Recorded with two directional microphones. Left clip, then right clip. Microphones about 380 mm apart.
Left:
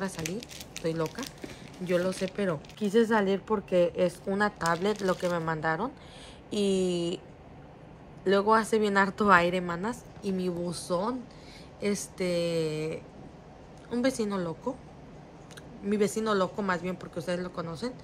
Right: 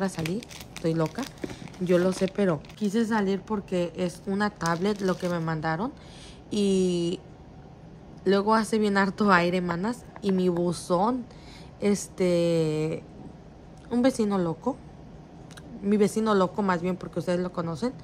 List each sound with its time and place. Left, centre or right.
0.0 s speech: centre
8.2 s speech: centre
15.8 s speech: centre